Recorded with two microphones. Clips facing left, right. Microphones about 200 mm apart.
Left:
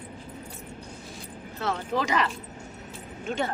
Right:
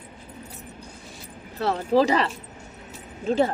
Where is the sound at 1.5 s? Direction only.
35° right (ahead or behind).